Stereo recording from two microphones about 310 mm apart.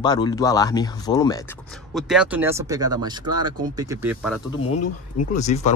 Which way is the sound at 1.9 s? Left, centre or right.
Centre.